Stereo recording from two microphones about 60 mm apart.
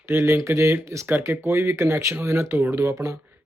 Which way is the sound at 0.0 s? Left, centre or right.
Right.